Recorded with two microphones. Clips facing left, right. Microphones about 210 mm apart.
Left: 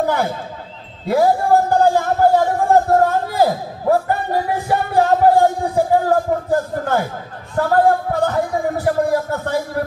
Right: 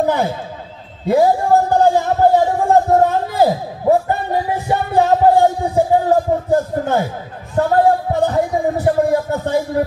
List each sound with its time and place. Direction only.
0.0 s speech: 20° right (ahead or behind)
2.3 s a sound: 20° right (ahead or behind)
3.9 s music: 20° right (ahead or behind)
7.5 s a man's voice: 20° right (ahead or behind)